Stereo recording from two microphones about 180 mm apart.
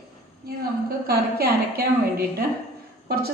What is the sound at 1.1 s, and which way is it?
Speech, 60° right (ahead or behind).